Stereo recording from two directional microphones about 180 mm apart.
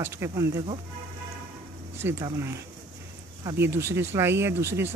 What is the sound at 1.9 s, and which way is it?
Speech, 15° right (ahead or behind).